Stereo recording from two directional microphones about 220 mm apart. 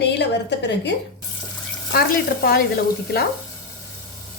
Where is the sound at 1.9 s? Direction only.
45° left (ahead or behind).